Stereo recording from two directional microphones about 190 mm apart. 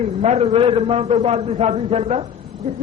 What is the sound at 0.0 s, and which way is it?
A man's voice, 35° right (ahead or behind).